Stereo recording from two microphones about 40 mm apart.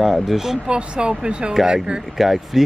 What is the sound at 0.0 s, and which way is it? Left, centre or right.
Speech, centre.